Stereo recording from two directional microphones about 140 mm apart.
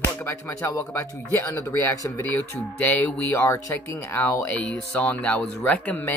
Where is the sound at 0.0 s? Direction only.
15° left (ahead or behind).